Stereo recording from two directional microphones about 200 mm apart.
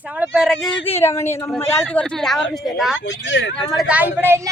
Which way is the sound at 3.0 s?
65° left (ahead or behind).